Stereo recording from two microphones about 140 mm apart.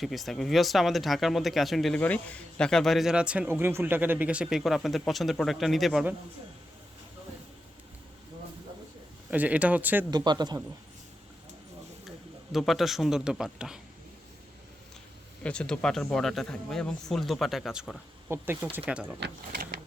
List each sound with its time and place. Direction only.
0.0 s a man's voice: centre (ahead or behind)
9.3 s speech: 10° right (ahead or behind)
10.1 s speech: 30° right (ahead or behind)
12.5 s a man's voice: centre (ahead or behind)
15.4 s a man's voice: 5° left (ahead or behind)
18.3 s speech: 15° right (ahead or behind)